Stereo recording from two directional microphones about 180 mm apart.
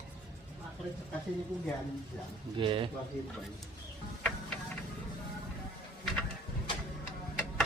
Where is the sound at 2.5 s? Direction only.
30° right (ahead or behind).